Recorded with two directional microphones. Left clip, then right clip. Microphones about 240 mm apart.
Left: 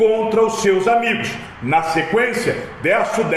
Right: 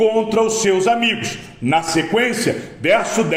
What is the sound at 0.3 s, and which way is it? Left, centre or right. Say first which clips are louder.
A man's voice: left 1 dB; right.